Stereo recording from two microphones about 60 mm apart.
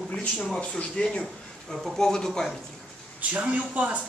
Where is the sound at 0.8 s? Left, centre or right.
Centre.